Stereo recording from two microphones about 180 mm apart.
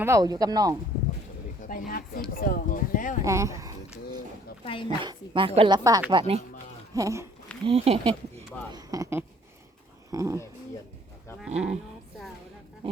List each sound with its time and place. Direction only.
0.0 s speech: 20° right (ahead or behind)
1.9 s speech: 55° left (ahead or behind)
3.2 s speech: 15° right (ahead or behind)
4.6 s a woman's voice: 30° left (ahead or behind)
4.9 s speech: 25° right (ahead or behind)
6.9 s speech: 15° right (ahead or behind)
7.6 s speech: 35° right (ahead or behind)
8.7 s speech: 20° right (ahead or behind)
11.3 s speech: 5° right (ahead or behind)
12.8 s speech: 30° right (ahead or behind)